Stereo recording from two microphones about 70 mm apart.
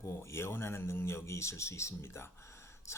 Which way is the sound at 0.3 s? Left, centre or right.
Left.